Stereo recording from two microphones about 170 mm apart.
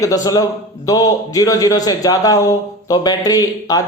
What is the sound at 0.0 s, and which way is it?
A man's voice, 20° left (ahead or behind).